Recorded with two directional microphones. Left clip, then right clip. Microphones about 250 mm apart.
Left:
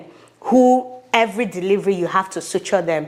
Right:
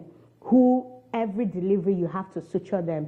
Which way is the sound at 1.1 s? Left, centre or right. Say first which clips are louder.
Left 11 dB; centre.